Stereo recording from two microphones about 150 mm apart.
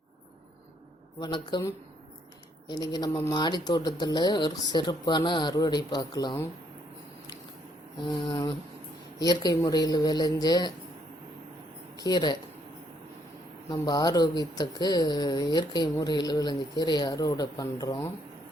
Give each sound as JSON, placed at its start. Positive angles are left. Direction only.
{"t": 1.2, "sound": "speech", "side_deg": 30}
{"t": 8.0, "sound": "a sound", "side_deg": 30}
{"t": 9.1, "sound": "speech", "side_deg": 25}
{"t": 11.9, "sound": "speech", "side_deg": 30}
{"t": 13.7, "sound": "speech", "side_deg": 25}